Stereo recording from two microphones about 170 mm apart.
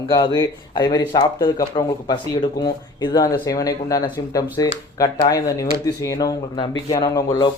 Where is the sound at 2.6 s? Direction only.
25° left (ahead or behind).